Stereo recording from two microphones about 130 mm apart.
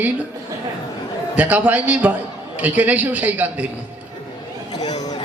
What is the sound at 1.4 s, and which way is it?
A man's voice, 10° right (ahead or behind).